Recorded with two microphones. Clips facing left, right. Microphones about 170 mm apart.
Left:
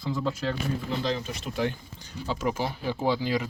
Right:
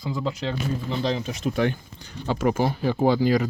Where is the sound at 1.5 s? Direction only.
60° right (ahead or behind).